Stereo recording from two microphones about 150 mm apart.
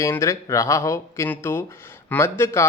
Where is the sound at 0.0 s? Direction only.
20° left (ahead or behind).